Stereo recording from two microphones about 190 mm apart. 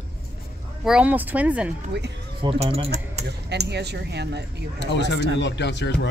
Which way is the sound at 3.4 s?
60° right (ahead or behind).